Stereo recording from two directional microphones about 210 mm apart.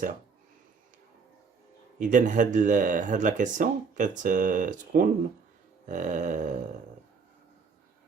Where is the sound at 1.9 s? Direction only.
35° right (ahead or behind).